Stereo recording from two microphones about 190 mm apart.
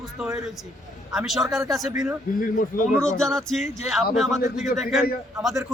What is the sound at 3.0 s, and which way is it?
Speech, 5° left (ahead or behind).